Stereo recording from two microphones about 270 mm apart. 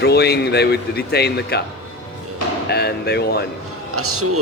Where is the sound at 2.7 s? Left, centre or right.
Left.